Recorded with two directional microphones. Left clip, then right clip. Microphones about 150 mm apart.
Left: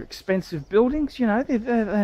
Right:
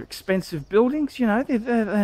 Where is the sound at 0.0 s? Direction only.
15° right (ahead or behind).